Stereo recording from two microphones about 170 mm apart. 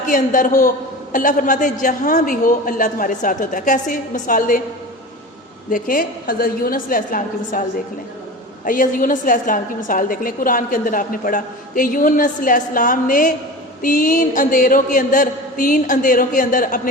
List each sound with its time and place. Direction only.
0.1 s a woman's voice: 55° left (ahead or behind)
5.7 s a woman's voice: 55° left (ahead or behind)
8.6 s a woman's voice: 55° left (ahead or behind)